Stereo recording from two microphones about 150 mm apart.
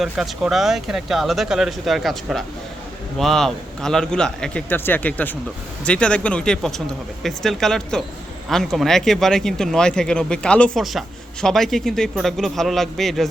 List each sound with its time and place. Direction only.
0.0 s speech: centre (ahead or behind)